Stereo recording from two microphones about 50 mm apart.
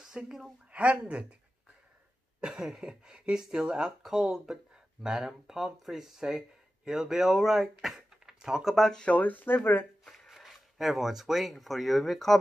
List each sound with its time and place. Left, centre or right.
0.0 s speech: centre
0.7 s speech: right
2.4 s speech: centre
9.1 s speech: left
10.2 s speech: centre